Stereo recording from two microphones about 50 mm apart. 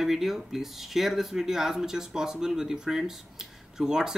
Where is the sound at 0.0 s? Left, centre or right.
Centre.